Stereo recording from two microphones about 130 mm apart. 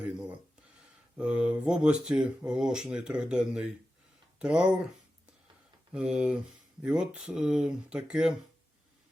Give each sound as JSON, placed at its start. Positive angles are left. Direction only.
{"t": 0.0, "sound": "a sound", "side_deg": -10}
{"t": 1.1, "sound": "speech", "side_deg": -10}
{"t": 5.9, "sound": "speech", "side_deg": -5}